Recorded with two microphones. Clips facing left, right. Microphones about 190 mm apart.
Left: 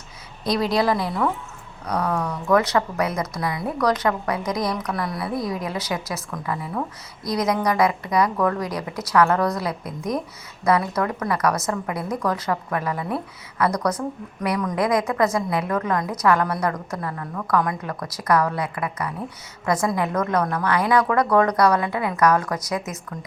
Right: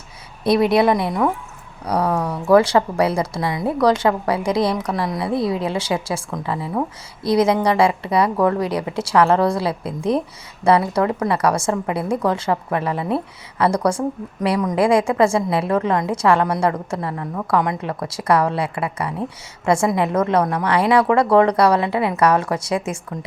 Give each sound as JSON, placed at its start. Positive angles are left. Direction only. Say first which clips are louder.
{"t": 0.4, "sound": "a woman's voice", "louder": "right 6 dB", "side_deg": -25}